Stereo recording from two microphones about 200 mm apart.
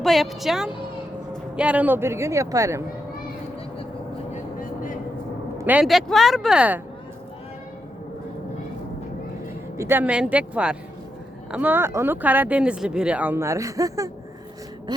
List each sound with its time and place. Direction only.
0.0 s speech: centre (ahead or behind)
5.5 s speech: 10° right (ahead or behind)
9.7 s speech: 10° right (ahead or behind)
14.9 s a sound: 20° right (ahead or behind)